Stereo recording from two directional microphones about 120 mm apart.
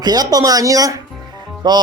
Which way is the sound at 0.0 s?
35° right (ahead or behind).